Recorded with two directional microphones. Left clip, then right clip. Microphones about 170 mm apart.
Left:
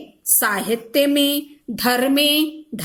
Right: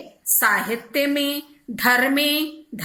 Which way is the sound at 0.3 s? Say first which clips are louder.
Right 1 dB; 35° left (ahead or behind).